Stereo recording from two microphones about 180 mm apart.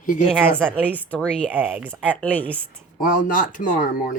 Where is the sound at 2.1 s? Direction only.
10° left (ahead or behind).